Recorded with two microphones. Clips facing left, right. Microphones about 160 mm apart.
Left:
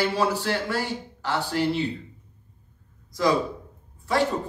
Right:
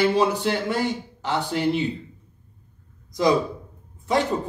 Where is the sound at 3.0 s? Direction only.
20° right (ahead or behind).